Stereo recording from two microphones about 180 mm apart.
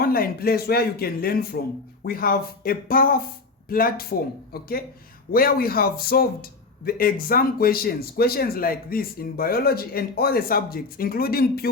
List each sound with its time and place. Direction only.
0.0 s a man's voice: 55° left (ahead or behind)